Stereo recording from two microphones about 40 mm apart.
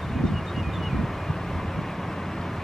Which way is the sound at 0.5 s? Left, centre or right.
Centre.